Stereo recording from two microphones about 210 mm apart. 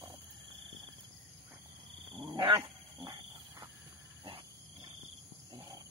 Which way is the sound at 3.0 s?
20° right (ahead or behind).